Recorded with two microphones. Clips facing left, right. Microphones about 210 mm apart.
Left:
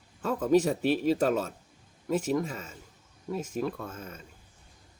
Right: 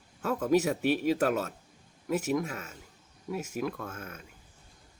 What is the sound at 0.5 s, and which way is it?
Speech, 5° right (ahead or behind).